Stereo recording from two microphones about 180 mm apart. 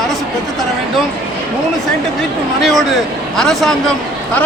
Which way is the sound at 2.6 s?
Centre (ahead or behind).